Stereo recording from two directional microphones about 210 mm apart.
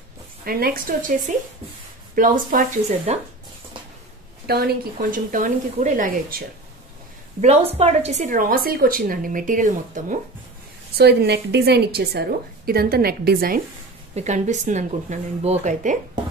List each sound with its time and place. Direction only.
0.5 s a woman's voice: 45° right (ahead or behind)
4.5 s a woman's voice: 50° right (ahead or behind)
7.4 s a woman's voice: 30° right (ahead or behind)
11.0 s a woman's voice: 50° right (ahead or behind)
14.1 s a woman's voice: 35° right (ahead or behind)